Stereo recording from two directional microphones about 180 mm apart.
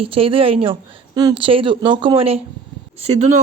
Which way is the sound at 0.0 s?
30° right (ahead or behind).